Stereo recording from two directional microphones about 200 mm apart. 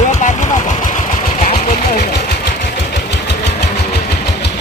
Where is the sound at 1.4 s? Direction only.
35° left (ahead or behind).